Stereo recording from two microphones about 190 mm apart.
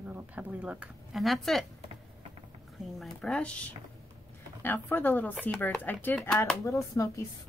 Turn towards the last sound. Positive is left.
turn(degrees=15)  # may be behind; listen again after turning